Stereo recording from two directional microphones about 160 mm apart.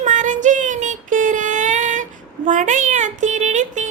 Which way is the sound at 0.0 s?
50° right (ahead or behind).